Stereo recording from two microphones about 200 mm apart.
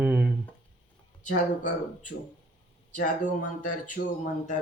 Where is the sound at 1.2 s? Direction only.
40° left (ahead or behind).